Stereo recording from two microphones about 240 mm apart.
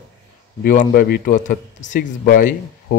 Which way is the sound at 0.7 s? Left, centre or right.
Left.